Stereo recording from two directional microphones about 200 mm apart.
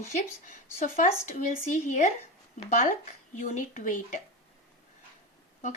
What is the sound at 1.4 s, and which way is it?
Speech, 40° left (ahead or behind).